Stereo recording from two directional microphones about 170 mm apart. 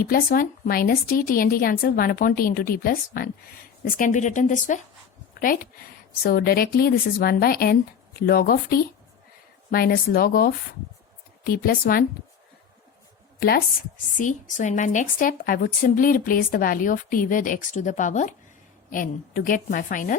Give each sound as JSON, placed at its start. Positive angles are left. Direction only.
{"t": 0.0, "sound": "a woman's voice", "side_deg": 60}
{"t": 14.5, "sound": "speech", "side_deg": 45}